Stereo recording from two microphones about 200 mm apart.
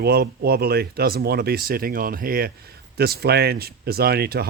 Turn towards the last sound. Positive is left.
turn(degrees=-50)  # may be behind; listen again after turning